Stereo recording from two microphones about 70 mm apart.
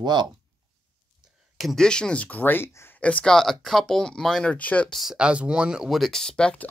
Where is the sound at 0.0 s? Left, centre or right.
Right.